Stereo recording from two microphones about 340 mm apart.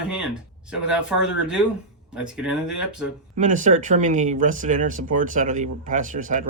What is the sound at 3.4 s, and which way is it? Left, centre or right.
Speech, right.